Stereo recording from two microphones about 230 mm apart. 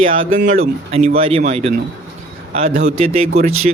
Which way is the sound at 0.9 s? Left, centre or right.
Right.